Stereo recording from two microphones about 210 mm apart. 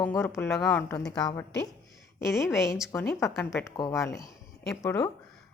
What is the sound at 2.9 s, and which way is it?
A woman's voice, 15° left (ahead or behind).